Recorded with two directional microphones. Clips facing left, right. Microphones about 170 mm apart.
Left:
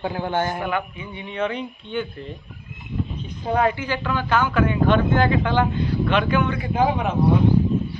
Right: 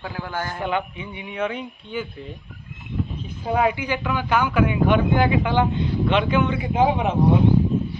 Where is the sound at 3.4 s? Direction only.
5° right (ahead or behind).